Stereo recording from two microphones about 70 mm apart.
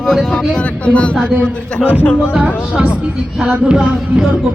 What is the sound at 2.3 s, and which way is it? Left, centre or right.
Music, centre.